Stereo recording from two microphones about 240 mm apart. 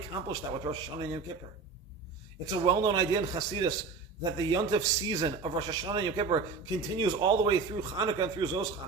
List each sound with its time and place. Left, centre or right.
0.3 s a man's voice: centre
2.6 s a man's voice: centre